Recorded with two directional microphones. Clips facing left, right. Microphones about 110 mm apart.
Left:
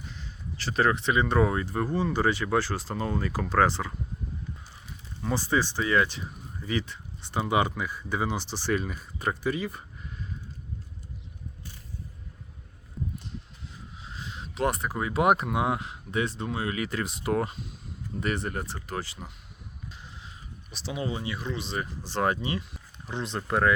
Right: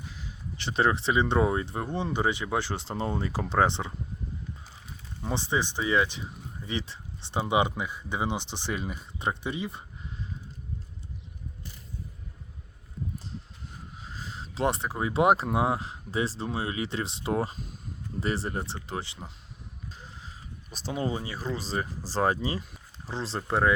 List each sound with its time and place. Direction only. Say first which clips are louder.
0.5 s speech: left 1 dB; 20° right (ahead or behind)
5.2 s speech: left 2 dB; 25° right (ahead or behind)
14.0 s speech: left 1 dB; 40° right (ahead or behind)
20.7 s speech: right 2 dB; 40° right (ahead or behind); by 23.7 s 25° right (ahead or behind)